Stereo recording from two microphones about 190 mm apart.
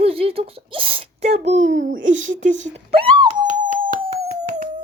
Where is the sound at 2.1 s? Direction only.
40° right (ahead or behind).